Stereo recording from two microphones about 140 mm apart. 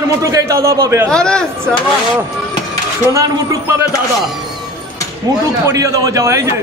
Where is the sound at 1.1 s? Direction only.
5° left (ahead or behind).